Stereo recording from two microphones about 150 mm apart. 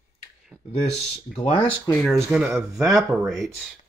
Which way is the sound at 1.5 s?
25° left (ahead or behind).